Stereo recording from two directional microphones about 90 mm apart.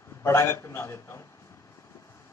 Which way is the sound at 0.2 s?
30° left (ahead or behind).